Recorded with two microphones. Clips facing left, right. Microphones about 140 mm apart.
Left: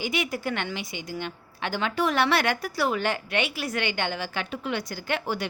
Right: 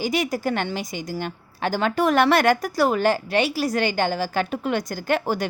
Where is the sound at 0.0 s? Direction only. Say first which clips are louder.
Right 5 dB; 40° right (ahead or behind).